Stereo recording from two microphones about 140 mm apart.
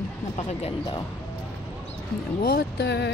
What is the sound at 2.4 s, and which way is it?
Speech, 90° left.